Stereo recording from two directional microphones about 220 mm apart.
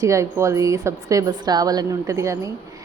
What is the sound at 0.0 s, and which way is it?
Speech, 15° right (ahead or behind).